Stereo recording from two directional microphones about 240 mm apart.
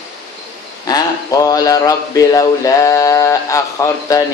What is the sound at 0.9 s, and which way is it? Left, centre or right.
Speech, centre.